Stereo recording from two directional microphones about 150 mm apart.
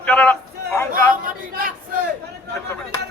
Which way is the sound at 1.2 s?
70° right (ahead or behind).